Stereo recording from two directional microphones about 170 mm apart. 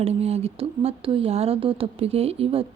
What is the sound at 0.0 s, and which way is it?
Speech, 35° right (ahead or behind).